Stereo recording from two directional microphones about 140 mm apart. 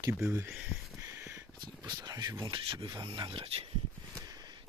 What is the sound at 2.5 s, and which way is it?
Speech, 35° right (ahead or behind).